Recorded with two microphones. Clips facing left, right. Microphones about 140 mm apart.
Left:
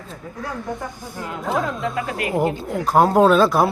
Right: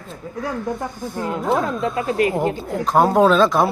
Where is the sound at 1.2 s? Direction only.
30° right (ahead or behind).